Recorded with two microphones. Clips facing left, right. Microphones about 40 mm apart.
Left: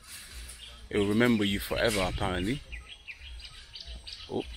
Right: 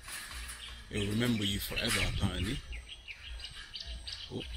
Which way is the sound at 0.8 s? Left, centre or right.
Left.